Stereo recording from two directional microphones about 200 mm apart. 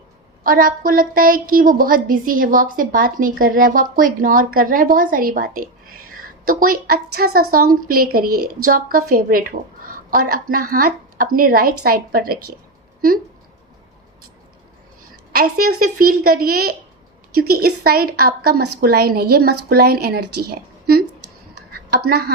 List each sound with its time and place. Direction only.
0.4 s a woman's voice: 45° right (ahead or behind)
15.4 s a woman's voice: 50° right (ahead or behind)